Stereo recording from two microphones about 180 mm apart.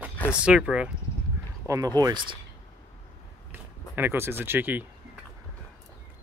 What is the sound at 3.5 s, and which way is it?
Speech, 10° right (ahead or behind).